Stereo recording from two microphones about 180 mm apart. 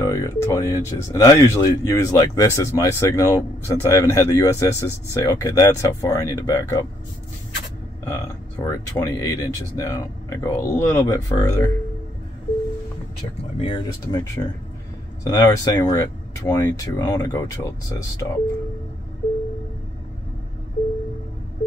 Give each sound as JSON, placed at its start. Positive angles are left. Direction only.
{"t": 0.0, "sound": "speech", "side_deg": 15}
{"t": 8.0, "sound": "speech", "side_deg": 20}
{"t": 13.6, "sound": "speech", "side_deg": 30}
{"t": 14.2, "sound": "speech", "side_deg": 20}